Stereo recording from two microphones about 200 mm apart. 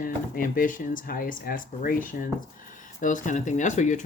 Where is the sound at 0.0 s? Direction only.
45° left (ahead or behind).